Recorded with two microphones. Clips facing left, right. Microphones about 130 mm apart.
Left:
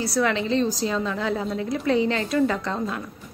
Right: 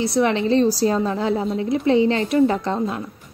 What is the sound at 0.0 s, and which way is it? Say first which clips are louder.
A woman's voice: right 4 dB; 25° right (ahead or behind).